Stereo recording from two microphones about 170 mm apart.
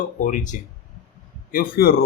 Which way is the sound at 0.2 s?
50° left (ahead or behind).